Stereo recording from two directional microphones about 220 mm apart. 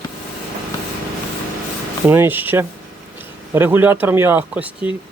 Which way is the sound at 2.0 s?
10° right (ahead or behind).